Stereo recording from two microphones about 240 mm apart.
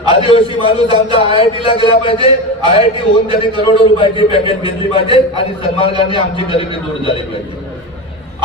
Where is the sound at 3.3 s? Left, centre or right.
Left.